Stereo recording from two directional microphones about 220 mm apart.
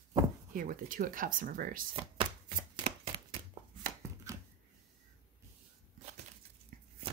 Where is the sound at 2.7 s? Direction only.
20° right (ahead or behind).